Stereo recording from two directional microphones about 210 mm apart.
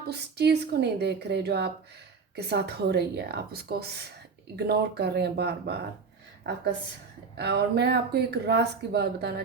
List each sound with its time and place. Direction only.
0.1 s speech: 50° right (ahead or behind)
7.3 s speech: 50° right (ahead or behind)